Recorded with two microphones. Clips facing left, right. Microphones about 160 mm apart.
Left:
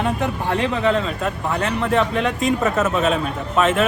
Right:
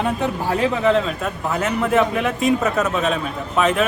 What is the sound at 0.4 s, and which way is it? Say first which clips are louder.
A man's voice: right 2 dB; 5° right (ahead or behind).